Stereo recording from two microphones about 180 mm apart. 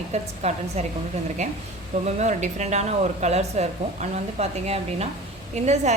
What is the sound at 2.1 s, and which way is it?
A woman's voice, 40° right (ahead or behind).